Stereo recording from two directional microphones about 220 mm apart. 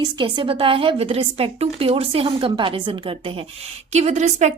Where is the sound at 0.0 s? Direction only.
20° right (ahead or behind).